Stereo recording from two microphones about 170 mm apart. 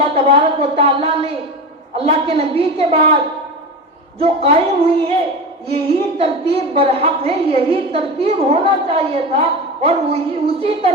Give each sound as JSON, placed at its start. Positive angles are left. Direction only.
{"t": 0.0, "sound": "a woman's voice", "side_deg": -35}